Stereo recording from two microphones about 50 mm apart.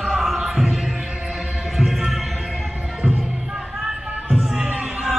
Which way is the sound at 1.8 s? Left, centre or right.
Centre.